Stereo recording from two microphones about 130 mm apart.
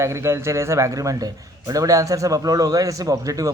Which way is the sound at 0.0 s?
20° right (ahead or behind).